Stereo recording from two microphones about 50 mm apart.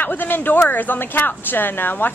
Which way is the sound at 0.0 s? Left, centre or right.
Left.